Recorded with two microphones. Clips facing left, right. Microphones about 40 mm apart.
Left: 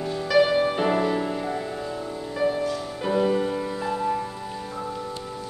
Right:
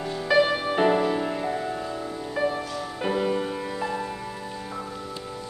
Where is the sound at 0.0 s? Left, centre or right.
Centre.